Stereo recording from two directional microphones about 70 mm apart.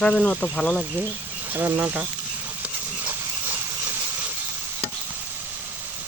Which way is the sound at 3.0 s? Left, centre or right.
Right.